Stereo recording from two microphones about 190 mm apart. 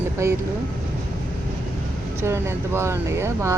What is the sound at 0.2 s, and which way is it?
Speech, 15° right (ahead or behind).